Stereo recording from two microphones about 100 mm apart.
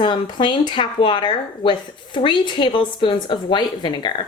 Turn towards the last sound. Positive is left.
turn(degrees=55)  # may be behind; listen again after turning